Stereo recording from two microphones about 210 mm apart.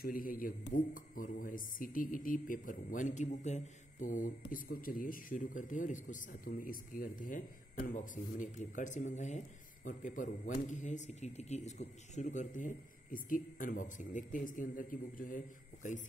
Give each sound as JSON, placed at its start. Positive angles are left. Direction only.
{"t": 0.0, "sound": "speech", "side_deg": 40}